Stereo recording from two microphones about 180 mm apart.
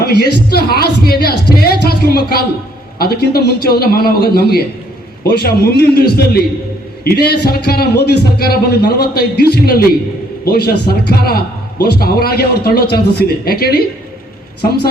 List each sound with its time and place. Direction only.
0.0 s a man's voice: 60° left (ahead or behind)